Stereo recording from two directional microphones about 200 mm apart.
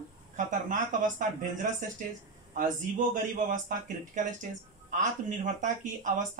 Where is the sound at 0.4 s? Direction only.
40° right (ahead or behind).